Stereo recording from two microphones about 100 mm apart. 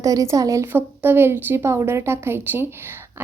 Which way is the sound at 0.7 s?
20° right (ahead or behind).